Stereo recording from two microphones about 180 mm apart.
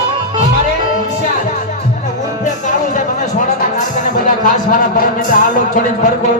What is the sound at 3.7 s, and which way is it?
Music, 45° left (ahead or behind).